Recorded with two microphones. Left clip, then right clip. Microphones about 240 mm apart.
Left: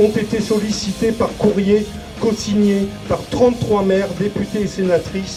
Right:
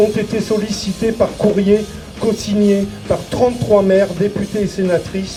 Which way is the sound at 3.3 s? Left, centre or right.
Right.